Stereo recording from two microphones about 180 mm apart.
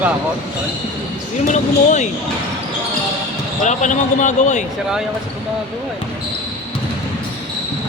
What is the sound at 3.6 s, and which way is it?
A man's voice, 45° left (ahead or behind).